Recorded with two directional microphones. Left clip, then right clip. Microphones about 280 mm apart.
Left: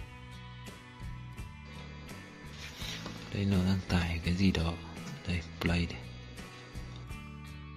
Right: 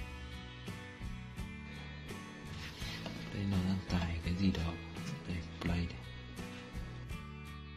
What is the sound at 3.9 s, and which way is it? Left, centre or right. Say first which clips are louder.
Speech: left 6 dB; left.